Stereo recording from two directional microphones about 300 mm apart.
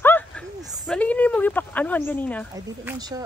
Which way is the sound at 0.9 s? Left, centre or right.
Centre.